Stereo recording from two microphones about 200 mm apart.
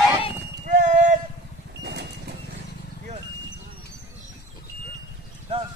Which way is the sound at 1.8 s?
55° right (ahead or behind).